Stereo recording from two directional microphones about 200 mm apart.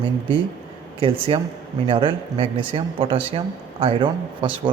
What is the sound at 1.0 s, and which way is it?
Speech, 25° right (ahead or behind).